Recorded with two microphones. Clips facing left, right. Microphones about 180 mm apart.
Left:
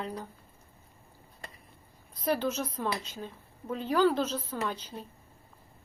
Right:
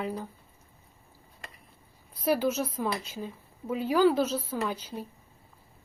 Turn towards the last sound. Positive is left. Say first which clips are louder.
# right 2 dB
turn(degrees=-10)  # may be behind; listen again after turning